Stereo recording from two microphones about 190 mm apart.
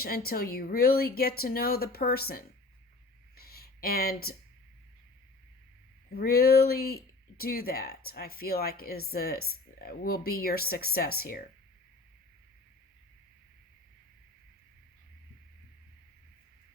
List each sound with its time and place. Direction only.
0.0 s speech: 50° left (ahead or behind)
3.3 s a sound: 55° left (ahead or behind)
6.1 s speech: 55° left (ahead or behind)